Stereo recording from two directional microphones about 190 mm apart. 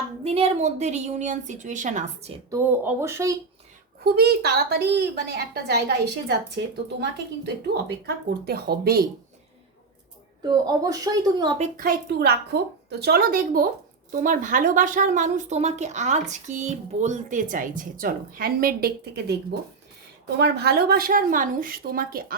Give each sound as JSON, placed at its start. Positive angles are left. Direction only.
{"t": 0.3, "sound": "a woman's voice", "side_deg": -35}
{"t": 2.5, "sound": "speech", "side_deg": -15}
{"t": 4.0, "sound": "a woman's voice", "side_deg": -55}
{"t": 7.4, "sound": "a woman's voice", "side_deg": -60}
{"t": 10.4, "sound": "a woman's voice", "side_deg": -20}
{"t": 11.8, "sound": "a woman's voice", "side_deg": -55}
{"t": 20.4, "sound": "a woman's voice", "side_deg": -60}